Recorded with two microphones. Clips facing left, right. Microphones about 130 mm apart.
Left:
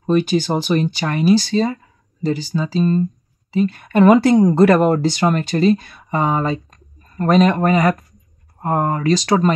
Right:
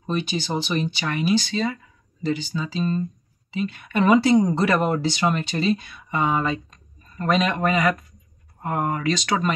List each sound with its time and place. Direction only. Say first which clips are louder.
0.0 s speech: left 10 dB; 45° left (ahead or behind)